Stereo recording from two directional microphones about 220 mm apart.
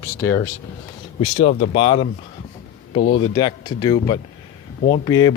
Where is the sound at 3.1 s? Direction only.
20° left (ahead or behind).